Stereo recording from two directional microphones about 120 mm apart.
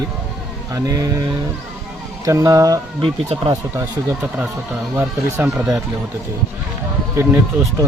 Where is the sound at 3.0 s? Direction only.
45° right (ahead or behind).